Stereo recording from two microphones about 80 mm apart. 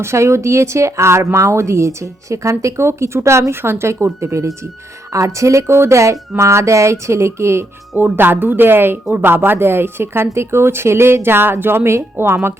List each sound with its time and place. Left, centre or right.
0.0 s speech: right